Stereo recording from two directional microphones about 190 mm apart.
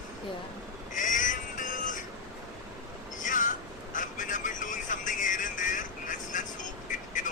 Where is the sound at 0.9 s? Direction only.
45° left (ahead or behind).